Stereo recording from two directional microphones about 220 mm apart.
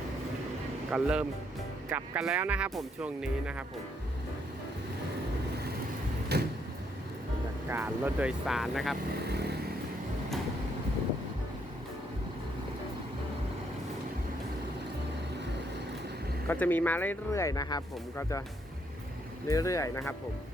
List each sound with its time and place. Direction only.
0.9 s speech: 5° right (ahead or behind)
6.3 s vehicle: 50° right (ahead or behind)
7.7 s speech: 10° right (ahead or behind)
9.3 s vehicle: 50° right (ahead or behind)
16.5 s speech: 10° left (ahead or behind)
19.5 s speech: 15° left (ahead or behind)